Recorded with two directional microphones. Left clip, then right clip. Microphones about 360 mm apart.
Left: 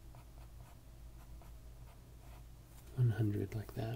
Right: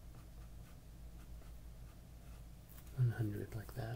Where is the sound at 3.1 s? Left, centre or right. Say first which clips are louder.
Left 7 dB; left.